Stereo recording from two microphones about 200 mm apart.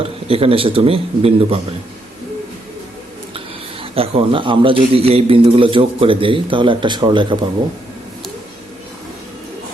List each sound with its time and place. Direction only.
0.0 s a man's voice: 30° right (ahead or behind)
3.9 s a man's voice: 30° right (ahead or behind)